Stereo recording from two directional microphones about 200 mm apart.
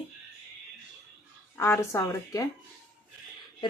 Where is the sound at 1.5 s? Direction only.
10° left (ahead or behind).